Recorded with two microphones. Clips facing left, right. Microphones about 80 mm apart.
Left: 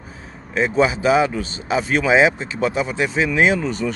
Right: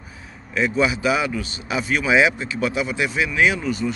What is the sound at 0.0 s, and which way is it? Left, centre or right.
A man's voice, left.